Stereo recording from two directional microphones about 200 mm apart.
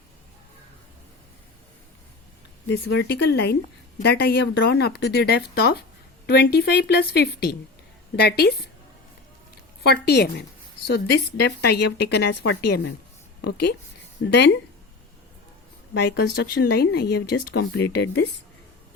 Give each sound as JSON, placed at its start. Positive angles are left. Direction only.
{"t": 2.6, "sound": "speech", "side_deg": 60}
{"t": 9.8, "sound": "speech", "side_deg": 55}
{"t": 14.2, "sound": "speech", "side_deg": 65}
{"t": 16.0, "sound": "speech", "side_deg": 55}